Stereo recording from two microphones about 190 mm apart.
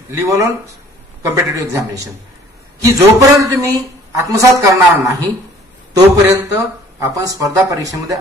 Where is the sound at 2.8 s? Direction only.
20° right (ahead or behind).